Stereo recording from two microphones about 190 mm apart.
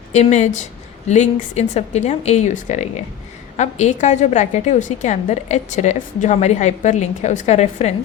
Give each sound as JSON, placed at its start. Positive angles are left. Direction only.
{"t": 0.1, "sound": "a woman's voice", "side_deg": 35}